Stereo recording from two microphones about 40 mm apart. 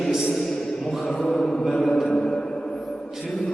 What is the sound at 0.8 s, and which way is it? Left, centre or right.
Mantra, centre.